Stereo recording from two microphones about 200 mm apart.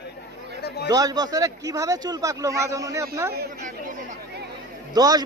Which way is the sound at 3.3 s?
45° right (ahead or behind).